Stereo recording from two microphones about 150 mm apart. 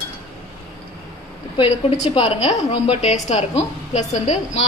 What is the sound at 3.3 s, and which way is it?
A woman's voice, 50° left (ahead or behind).